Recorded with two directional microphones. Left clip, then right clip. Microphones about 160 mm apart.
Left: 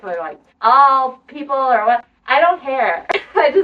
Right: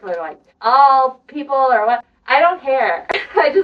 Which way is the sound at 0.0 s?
15° left (ahead or behind).